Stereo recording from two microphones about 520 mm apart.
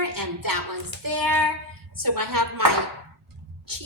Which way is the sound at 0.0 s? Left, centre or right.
Right.